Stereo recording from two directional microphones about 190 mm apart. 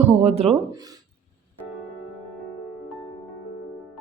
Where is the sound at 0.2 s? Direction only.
35° right (ahead or behind).